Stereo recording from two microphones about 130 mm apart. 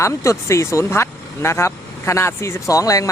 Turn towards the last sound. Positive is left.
turn(degrees=25)  # may be behind; listen again after turning